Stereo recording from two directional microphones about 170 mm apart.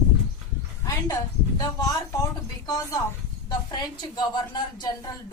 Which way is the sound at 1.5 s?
20° left (ahead or behind).